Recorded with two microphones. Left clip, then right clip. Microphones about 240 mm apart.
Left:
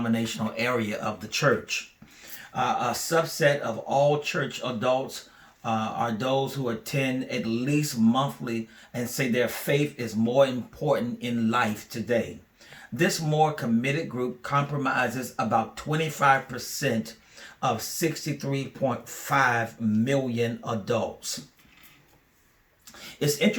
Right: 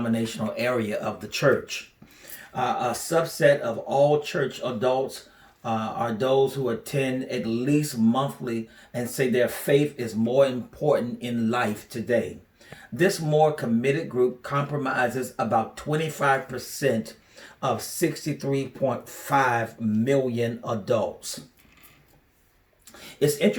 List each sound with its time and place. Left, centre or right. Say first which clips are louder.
0.1 s speech: right 1 dB; centre
3.1 s speech: right 3 dB; centre
23.2 s speech: right 3 dB; centre